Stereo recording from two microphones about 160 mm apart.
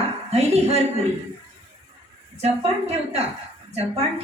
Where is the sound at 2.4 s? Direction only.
40° right (ahead or behind).